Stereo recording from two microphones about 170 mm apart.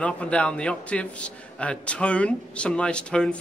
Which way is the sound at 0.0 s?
5° left (ahead or behind).